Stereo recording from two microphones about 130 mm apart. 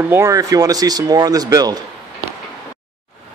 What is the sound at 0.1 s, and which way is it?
Speech, 25° right (ahead or behind).